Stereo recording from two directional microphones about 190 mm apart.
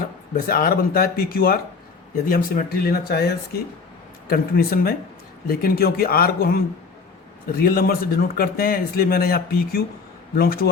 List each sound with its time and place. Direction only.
0.3 s speech: 50° left (ahead or behind)
7.6 s speech: 50° left (ahead or behind)